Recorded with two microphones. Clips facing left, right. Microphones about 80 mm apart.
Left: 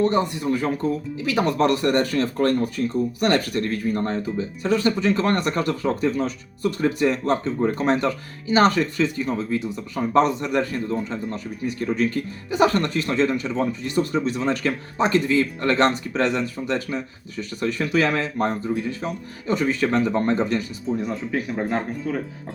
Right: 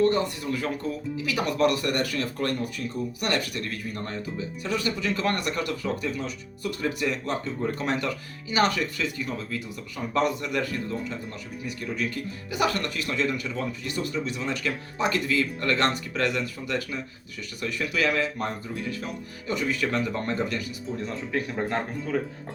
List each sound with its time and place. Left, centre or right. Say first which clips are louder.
0.0 s speech: left 3 dB; left
21.0 s speech: left 4 dB; centre